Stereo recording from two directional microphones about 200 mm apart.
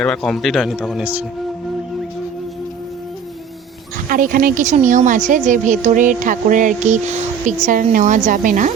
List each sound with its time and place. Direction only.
0.0 s speech: 5° left (ahead or behind)
4.1 s speech: 45° right (ahead or behind)